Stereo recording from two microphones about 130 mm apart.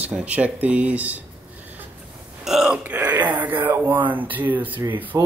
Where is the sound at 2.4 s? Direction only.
5° right (ahead or behind).